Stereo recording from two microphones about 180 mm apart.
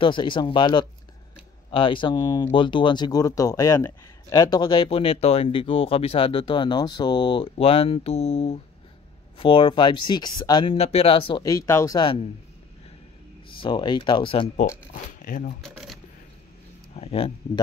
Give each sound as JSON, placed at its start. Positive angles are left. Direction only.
{"t": 0.0, "sound": "speech", "side_deg": 25}
{"t": 13.6, "sound": "speech", "side_deg": 25}
{"t": 15.2, "sound": "speech", "side_deg": 50}
{"t": 15.6, "sound": "speech", "side_deg": 0}
{"t": 16.9, "sound": "speech", "side_deg": 35}